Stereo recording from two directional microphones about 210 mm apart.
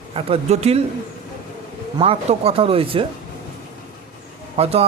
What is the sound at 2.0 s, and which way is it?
A man's voice, 25° right (ahead or behind).